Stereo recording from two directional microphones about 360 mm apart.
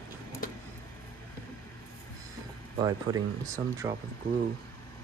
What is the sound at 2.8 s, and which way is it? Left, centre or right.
Speech, centre.